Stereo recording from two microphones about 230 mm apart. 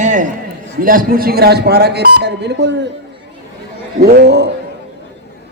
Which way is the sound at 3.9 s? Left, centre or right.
Right.